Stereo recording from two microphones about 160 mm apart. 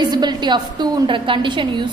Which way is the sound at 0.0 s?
25° right (ahead or behind).